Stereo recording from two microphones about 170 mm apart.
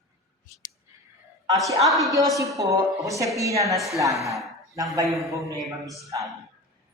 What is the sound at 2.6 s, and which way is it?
A man's voice, 20° right (ahead or behind).